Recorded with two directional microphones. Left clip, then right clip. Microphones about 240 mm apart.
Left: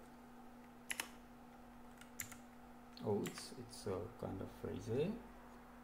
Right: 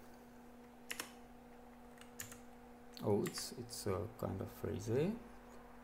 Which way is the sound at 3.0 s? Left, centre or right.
Right.